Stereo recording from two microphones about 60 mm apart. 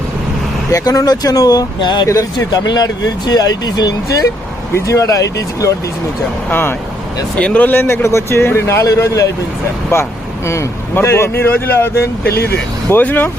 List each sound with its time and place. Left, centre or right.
0.7 s speech: left
2.0 s speech: left
4.7 s speech: left
6.5 s speech: left
7.3 s speech: left
7.7 s speech: left
9.0 s speech: left
12.9 s speech: left